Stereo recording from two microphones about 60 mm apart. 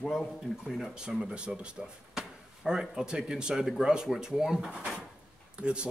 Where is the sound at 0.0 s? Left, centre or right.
Centre.